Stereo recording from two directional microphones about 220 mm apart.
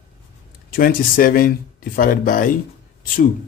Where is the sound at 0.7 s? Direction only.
40° left (ahead or behind).